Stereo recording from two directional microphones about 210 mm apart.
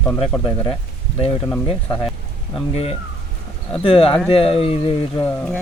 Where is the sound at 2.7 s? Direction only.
30° left (ahead or behind).